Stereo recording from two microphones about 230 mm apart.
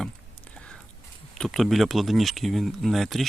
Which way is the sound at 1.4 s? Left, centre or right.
Centre.